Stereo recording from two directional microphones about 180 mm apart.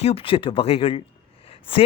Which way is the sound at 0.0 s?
30° left (ahead or behind).